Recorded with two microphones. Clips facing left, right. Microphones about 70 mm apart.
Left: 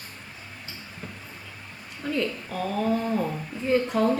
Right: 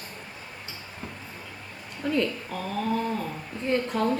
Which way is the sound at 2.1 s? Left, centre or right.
Centre.